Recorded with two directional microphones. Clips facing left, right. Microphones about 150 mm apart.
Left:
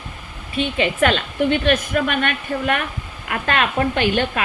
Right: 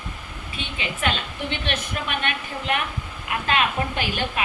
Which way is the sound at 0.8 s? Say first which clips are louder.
Left 8 dB; 60° left (ahead or behind).